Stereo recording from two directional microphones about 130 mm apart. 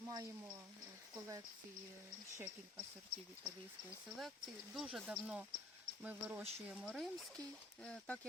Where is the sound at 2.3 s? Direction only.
15° right (ahead or behind).